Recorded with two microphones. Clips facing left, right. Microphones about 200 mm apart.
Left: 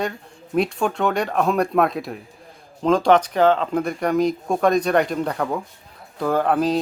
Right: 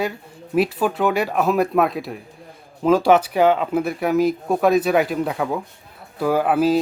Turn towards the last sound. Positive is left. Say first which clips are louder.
# right 2 dB
turn(degrees=-5)  # may be behind; listen again after turning